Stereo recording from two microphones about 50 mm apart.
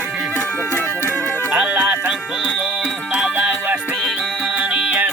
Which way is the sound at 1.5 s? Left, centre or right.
Right.